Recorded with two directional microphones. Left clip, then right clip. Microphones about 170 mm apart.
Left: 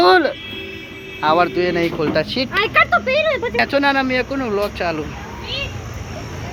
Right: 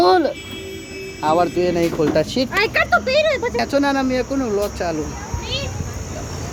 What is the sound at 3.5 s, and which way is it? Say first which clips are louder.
Speech: left 2 dB; 10° right (ahead or behind).